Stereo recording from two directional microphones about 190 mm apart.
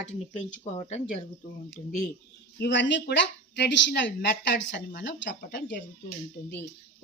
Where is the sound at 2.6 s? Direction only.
70° left (ahead or behind).